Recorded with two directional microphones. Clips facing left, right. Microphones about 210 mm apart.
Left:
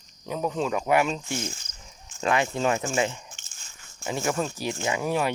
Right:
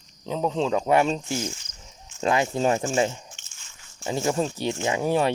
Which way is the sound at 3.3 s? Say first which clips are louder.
Left 1 dB; 40° left (ahead or behind).